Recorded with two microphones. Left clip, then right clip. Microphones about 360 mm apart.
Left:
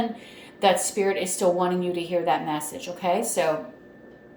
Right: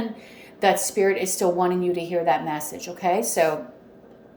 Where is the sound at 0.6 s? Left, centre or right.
Centre.